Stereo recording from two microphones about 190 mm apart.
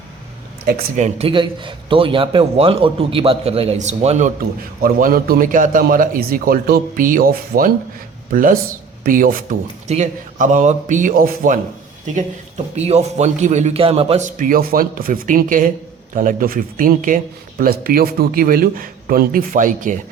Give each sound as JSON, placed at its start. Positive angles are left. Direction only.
{"t": 0.6, "sound": "a man's voice", "side_deg": -50}
{"t": 4.4, "sound": "a man's voice", "side_deg": -50}